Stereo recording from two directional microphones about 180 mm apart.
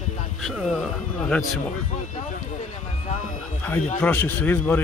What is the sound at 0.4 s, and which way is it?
Speech, centre (ahead or behind).